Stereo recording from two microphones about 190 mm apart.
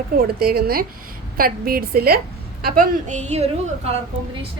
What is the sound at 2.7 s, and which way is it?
A woman's voice, 40° right (ahead or behind).